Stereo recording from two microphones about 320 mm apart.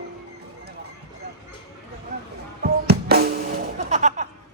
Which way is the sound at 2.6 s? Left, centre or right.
Right.